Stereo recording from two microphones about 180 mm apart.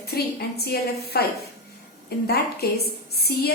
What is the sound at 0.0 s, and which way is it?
A woman's voice, 60° left (ahead or behind).